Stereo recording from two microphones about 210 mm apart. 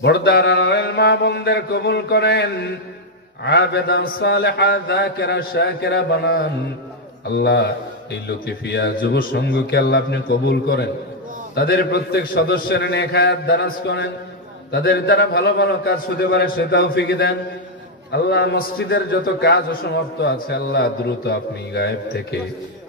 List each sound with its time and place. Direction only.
0.0 s a man's voice: 55° left (ahead or behind)